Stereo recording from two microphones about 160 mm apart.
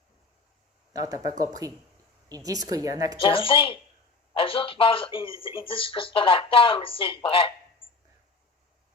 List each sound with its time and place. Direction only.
0.9 s a woman's voice: 20° right (ahead or behind)
3.2 s speech: 35° left (ahead or behind)